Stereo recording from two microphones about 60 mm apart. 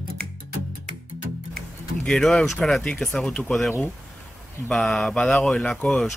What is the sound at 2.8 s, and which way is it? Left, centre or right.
Speech, centre.